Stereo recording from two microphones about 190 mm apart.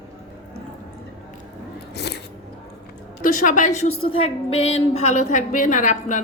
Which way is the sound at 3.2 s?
45° left (ahead or behind).